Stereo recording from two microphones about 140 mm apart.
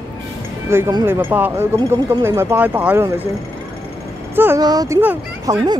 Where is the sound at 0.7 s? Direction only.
20° right (ahead or behind).